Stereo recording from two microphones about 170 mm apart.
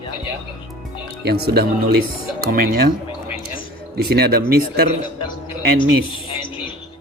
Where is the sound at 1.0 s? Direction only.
70° right (ahead or behind).